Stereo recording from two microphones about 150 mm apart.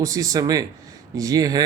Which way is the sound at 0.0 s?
25° right (ahead or behind).